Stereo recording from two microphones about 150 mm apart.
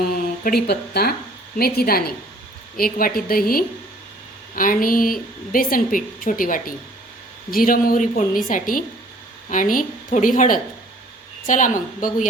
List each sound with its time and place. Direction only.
0.1 s a woman's voice: 85° left
2.7 s a woman's voice: 75° left (ahead or behind)
4.5 s a woman's voice: 65° left (ahead or behind)